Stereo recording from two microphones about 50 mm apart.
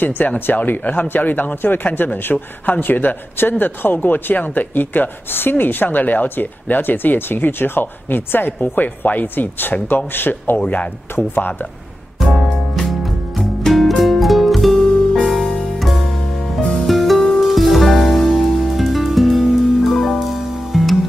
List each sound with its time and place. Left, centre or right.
0.5 s speech: left
10.6 s speech: left
11.1 s speech: left
12.2 s music: centre
15.8 s music: centre